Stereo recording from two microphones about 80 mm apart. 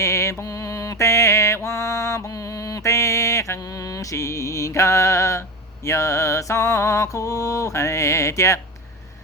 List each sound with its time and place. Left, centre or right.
0.0 s mantra: left